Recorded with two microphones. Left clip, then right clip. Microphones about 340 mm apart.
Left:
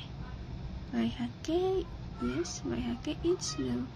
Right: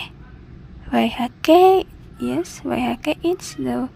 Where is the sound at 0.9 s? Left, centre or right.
Right.